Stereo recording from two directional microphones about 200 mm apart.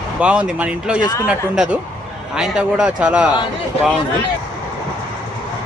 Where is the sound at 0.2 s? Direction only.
5° right (ahead or behind).